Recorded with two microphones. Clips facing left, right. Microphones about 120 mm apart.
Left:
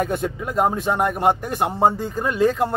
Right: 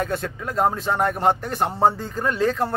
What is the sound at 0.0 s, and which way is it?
A man's voice, 15° left (ahead or behind).